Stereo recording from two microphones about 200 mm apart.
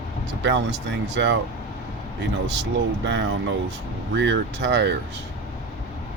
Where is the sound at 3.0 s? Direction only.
60° right (ahead or behind).